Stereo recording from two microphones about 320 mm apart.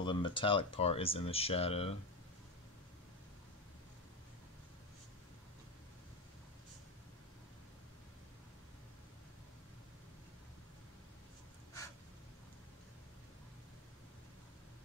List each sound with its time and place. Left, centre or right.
0.0 s speech: centre